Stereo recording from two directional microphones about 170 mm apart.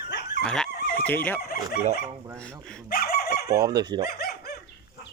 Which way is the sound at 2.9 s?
60° left (ahead or behind).